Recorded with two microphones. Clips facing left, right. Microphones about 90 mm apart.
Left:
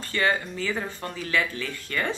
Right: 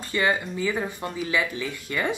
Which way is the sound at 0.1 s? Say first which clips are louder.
Right 1 dB; 15° right (ahead or behind).